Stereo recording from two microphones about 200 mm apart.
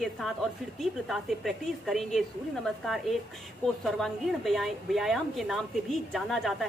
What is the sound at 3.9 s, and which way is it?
A woman's voice, centre (ahead or behind).